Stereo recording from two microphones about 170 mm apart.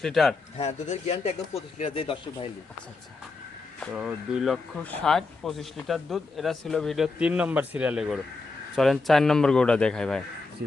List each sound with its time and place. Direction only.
0.0 s speech: centre (ahead or behind)
0.5 s speech: 40° left (ahead or behind)
3.9 s speech: 5° right (ahead or behind)